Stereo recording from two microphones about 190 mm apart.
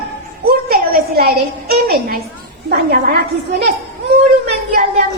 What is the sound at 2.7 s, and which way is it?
Speech, 55° right (ahead or behind).